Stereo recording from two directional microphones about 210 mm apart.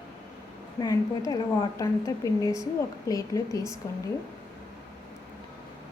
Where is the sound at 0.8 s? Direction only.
15° left (ahead or behind).